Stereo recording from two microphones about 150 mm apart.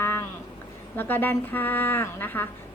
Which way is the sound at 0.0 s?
15° left (ahead or behind).